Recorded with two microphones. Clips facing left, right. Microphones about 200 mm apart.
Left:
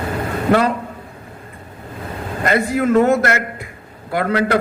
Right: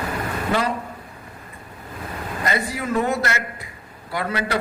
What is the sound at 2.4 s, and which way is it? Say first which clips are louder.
A man's voice: left 9 dB; 55° left (ahead or behind).